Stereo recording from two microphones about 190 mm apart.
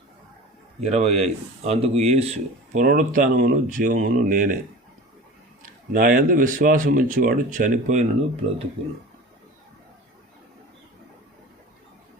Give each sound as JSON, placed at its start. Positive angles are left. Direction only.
{"t": 0.8, "sound": "speech", "side_deg": -35}
{"t": 2.8, "sound": "speech", "side_deg": -45}
{"t": 5.9, "sound": "speech", "side_deg": -45}